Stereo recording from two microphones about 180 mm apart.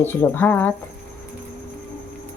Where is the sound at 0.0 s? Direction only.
10° left (ahead or behind).